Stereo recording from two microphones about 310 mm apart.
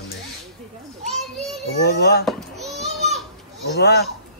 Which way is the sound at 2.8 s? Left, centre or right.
Right.